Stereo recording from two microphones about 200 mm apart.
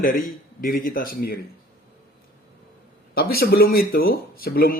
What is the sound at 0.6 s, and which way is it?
Speech, 45° left (ahead or behind).